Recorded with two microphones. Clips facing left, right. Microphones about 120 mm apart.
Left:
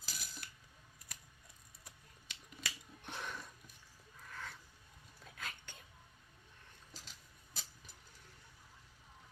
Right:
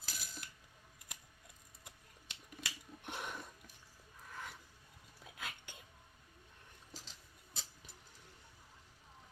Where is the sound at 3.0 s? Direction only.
15° right (ahead or behind).